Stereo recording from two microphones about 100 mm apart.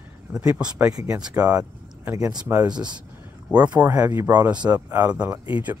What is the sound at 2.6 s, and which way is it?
Speech, 10° right (ahead or behind).